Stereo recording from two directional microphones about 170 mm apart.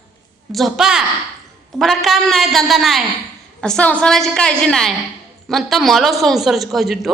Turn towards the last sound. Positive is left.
turn(degrees=0)  # may be behind; listen again after turning